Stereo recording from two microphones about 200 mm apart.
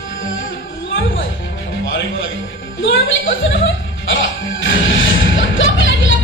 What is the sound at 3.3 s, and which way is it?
Music, 75° left (ahead or behind).